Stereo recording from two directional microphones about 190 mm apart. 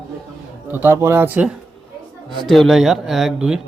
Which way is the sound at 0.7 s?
10° right (ahead or behind).